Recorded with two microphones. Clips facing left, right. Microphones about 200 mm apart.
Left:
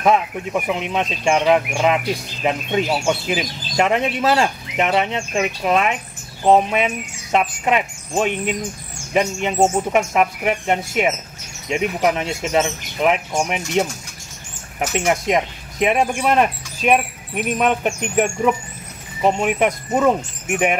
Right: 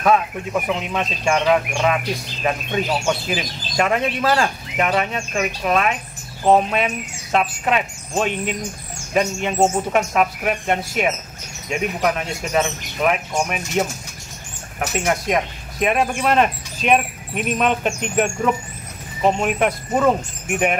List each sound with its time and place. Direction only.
0.0 s speech: 20° left (ahead or behind)